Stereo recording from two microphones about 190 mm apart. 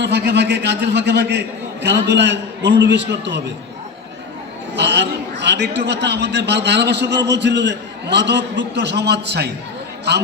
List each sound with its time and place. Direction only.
0.0 s a man's voice: 60° right (ahead or behind)
4.7 s a man's voice: 65° right (ahead or behind)